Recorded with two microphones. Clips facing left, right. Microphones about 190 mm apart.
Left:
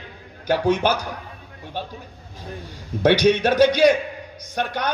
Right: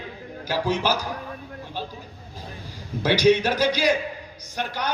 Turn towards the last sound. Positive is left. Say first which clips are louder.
# left 4 dB
turn(degrees=60)  # may be behind; listen again after turning